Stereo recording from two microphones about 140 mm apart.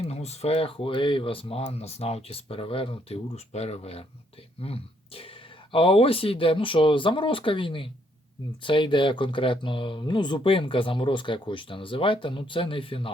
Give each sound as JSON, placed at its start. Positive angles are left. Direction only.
{"t": 0.0, "sound": "speech", "side_deg": 50}